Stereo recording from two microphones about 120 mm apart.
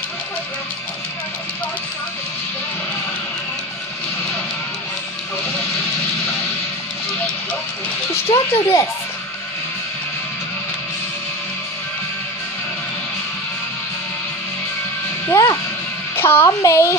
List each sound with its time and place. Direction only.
8.1 s speech: 20° left (ahead or behind)
15.2 s speech: 30° left (ahead or behind)
16.2 s speech: 20° left (ahead or behind)